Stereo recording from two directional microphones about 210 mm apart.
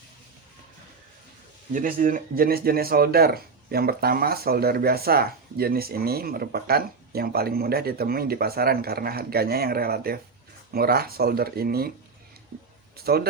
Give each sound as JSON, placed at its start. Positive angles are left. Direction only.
{"t": 1.7, "sound": "speech", "side_deg": -40}
{"t": 13.1, "sound": "speech", "side_deg": -45}